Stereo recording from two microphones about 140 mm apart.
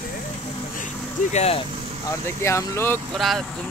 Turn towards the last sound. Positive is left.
turn(degrees=0)  # may be behind; listen again after turning